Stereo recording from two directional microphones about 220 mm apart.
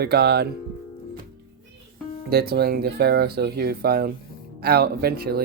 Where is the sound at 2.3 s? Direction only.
45° right (ahead or behind).